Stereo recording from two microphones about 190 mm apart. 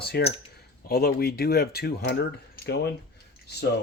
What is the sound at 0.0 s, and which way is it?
Speech, 55° left (ahead or behind).